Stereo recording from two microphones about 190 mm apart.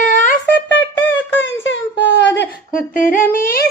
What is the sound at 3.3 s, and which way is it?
Singing, 50° left (ahead or behind).